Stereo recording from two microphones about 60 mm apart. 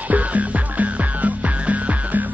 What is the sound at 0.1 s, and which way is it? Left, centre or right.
Music, right.